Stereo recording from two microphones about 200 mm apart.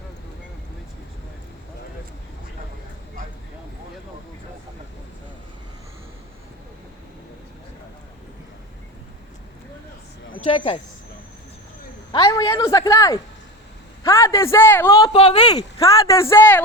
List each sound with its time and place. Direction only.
10.4 s speech: 30° left (ahead or behind)
12.1 s a man's voice: 15° left (ahead or behind)
15.1 s speech: 30° left (ahead or behind)
15.5 s speech: 15° left (ahead or behind)